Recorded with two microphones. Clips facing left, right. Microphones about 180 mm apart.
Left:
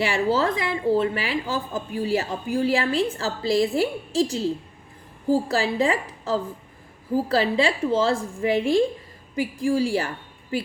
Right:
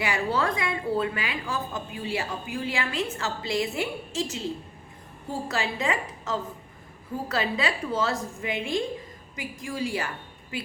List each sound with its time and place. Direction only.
0.3 s a woman's voice: 25° left (ahead or behind)